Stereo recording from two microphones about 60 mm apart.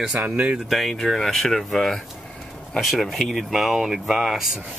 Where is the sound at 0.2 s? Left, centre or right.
Right.